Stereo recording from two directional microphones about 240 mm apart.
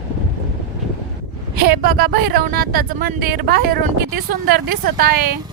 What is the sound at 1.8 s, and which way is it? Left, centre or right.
Speech, right.